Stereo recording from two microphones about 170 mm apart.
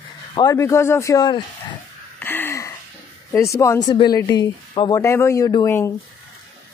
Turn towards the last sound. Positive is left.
turn(degrees=15)  # may be behind; listen again after turning